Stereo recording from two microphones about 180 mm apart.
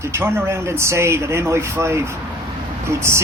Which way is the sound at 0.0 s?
15° right (ahead or behind).